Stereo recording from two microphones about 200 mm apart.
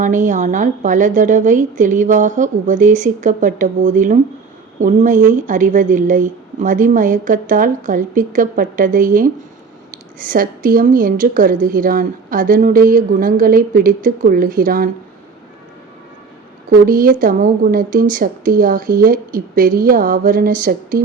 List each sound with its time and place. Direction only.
0.0 s a woman's voice: 40° right (ahead or behind)
16.6 s a woman's voice: 45° right (ahead or behind)